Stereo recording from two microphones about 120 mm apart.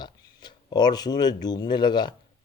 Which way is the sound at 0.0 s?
35° left (ahead or behind).